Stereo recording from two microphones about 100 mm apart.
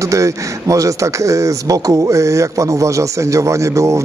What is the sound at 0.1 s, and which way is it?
Speech, 35° right (ahead or behind).